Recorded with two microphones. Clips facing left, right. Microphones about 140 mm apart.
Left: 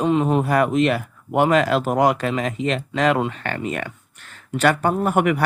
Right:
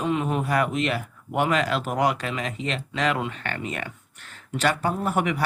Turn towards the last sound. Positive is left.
turn(degrees=60)  # may be behind; listen again after turning